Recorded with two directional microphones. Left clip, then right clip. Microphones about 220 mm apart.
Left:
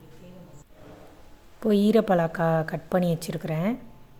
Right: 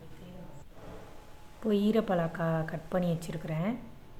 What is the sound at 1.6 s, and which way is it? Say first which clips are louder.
A woman's voice: left 7 dB; 35° left (ahead or behind).